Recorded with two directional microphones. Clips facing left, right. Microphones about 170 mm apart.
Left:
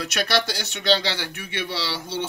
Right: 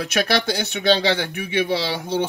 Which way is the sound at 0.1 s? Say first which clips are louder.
Right 4 dB; 55° right (ahead or behind).